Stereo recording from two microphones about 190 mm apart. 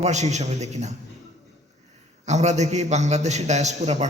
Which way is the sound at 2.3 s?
35° right (ahead or behind).